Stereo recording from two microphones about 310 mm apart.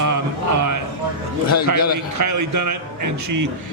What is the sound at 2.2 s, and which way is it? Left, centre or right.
A man's voice, right.